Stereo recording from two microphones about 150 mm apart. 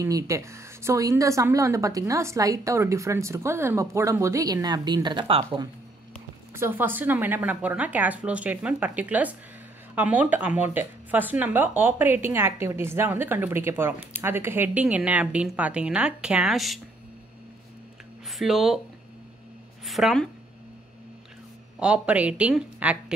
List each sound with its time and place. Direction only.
0.0 s a woman's voice: 20° right (ahead or behind)
6.5 s speech: 15° right (ahead or behind)
18.3 s speech: centre (ahead or behind)
19.8 s a woman's voice: centre (ahead or behind)
21.7 s speech: 5° right (ahead or behind)